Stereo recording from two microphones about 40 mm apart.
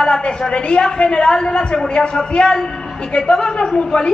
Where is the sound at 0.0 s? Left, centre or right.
Centre.